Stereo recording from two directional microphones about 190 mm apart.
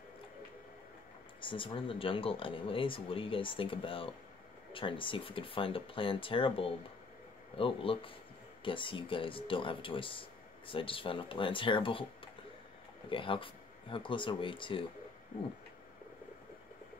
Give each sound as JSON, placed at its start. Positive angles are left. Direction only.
{"t": 1.4, "sound": "speech", "side_deg": 25}
{"t": 13.1, "sound": "speech", "side_deg": 25}